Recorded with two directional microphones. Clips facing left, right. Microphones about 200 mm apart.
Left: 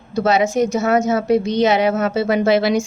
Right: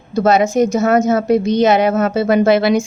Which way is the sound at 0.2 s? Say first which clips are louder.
Right 3 dB; 45° right (ahead or behind).